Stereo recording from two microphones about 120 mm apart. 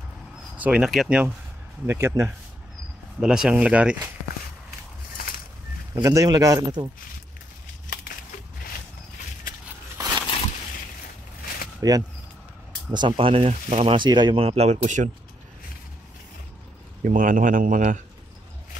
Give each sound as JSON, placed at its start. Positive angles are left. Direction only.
{"t": 0.6, "sound": "speech", "side_deg": -10}
{"t": 1.9, "sound": "speech", "side_deg": -20}
{"t": 3.2, "sound": "speech", "side_deg": -5}
{"t": 5.9, "sound": "speech", "side_deg": -30}
{"t": 9.9, "sound": "a sound", "side_deg": -30}
{"t": 11.8, "sound": "speech", "side_deg": -30}
{"t": 13.5, "sound": "speech", "side_deg": -60}
{"t": 14.4, "sound": "speech", "side_deg": -60}
{"t": 17.0, "sound": "speech", "side_deg": -90}